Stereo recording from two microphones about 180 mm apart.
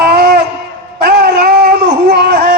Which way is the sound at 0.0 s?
65° right (ahead or behind).